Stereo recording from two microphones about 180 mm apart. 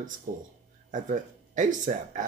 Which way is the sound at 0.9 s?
45° right (ahead or behind).